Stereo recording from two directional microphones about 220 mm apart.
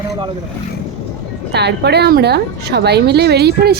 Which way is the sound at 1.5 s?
50° right (ahead or behind).